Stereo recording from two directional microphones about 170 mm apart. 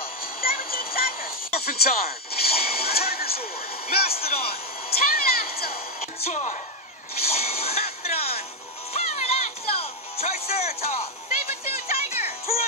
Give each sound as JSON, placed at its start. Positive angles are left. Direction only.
{"t": 0.2, "sound": "music", "side_deg": 60}
{"t": 3.9, "sound": "speech", "side_deg": 65}
{"t": 4.2, "sound": "a man's voice", "side_deg": 35}
{"t": 4.9, "sound": "speech", "side_deg": 65}
{"t": 6.2, "sound": "speech", "side_deg": 45}
{"t": 7.2, "sound": "a sound", "side_deg": 35}
{"t": 8.9, "sound": "music", "side_deg": 35}